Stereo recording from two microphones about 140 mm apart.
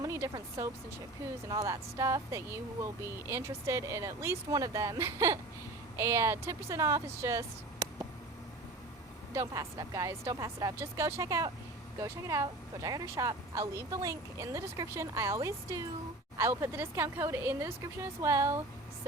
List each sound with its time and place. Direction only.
0.0 s speech: 20° right (ahead or behind)
9.3 s speech: 20° right (ahead or behind)